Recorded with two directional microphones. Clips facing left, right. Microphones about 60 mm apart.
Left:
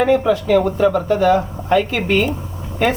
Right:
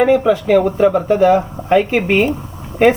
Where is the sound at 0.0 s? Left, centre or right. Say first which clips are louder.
Right 3 dB; centre.